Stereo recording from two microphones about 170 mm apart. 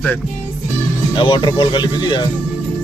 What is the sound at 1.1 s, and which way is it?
Speech, 25° left (ahead or behind).